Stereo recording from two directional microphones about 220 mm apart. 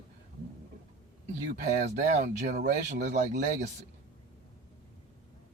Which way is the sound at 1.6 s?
30° right (ahead or behind).